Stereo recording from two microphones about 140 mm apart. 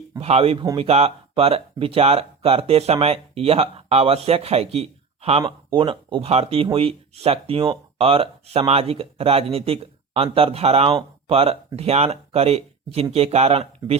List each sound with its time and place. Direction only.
0.2 s speech: 45° right (ahead or behind)